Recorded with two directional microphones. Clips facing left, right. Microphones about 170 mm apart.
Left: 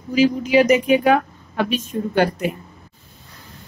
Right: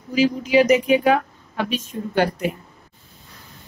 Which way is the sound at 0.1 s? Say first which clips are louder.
Left 2 dB; 55° left (ahead or behind).